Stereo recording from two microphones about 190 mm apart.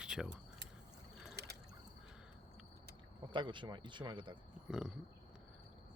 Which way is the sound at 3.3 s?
25° right (ahead or behind).